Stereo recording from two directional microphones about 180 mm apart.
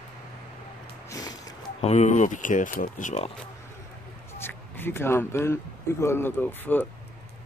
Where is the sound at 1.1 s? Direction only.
20° left (ahead or behind).